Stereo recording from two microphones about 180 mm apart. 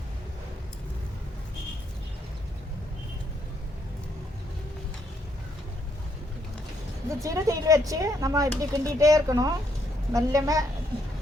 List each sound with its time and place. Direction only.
7.2 s speech: 20° right (ahead or behind)